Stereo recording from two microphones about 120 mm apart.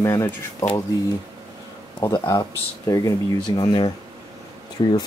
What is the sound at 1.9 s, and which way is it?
Speech, 35° left (ahead or behind).